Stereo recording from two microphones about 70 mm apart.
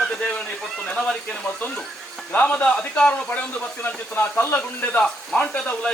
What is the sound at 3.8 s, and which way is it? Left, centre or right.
A man's voice, left.